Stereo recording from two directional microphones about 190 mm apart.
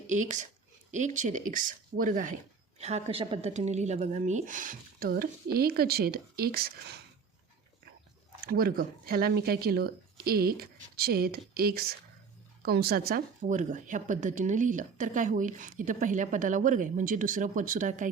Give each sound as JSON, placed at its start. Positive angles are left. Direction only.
{"t": 0.1, "sound": "speech", "side_deg": -40}
{"t": 8.4, "sound": "speech", "side_deg": -50}